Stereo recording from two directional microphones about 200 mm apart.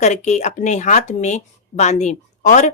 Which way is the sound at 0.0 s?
35° left (ahead or behind).